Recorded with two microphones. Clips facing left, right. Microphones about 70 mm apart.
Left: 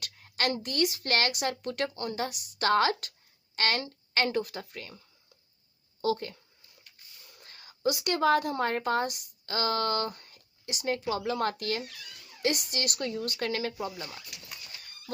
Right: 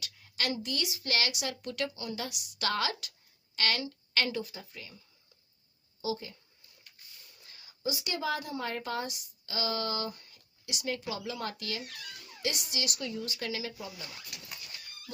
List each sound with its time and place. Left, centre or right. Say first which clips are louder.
0.0 s a woman's voice: left 5 dB; left
4.4 s speech: left 6 dB; left
6.0 s speech: left 6 dB; left
7.3 s a woman's voice: left 4 dB; left